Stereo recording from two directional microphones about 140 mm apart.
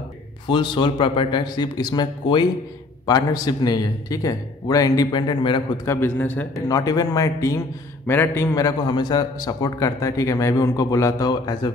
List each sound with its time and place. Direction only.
0.5 s a man's voice: 35° left (ahead or behind)
5.9 s a man's voice: 15° left (ahead or behind)
6.7 s a man's voice: 25° left (ahead or behind)